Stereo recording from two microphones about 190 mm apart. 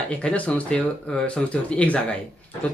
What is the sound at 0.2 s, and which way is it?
Speech, 5° left (ahead or behind).